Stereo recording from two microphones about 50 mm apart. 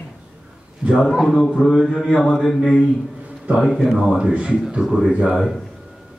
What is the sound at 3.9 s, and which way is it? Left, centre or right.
Speech, centre.